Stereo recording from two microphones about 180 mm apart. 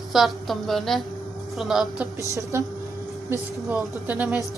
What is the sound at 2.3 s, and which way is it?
Speech, 15° right (ahead or behind).